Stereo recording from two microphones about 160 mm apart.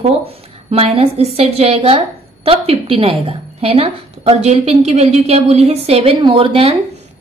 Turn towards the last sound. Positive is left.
turn(degrees=-35)  # may be behind; listen again after turning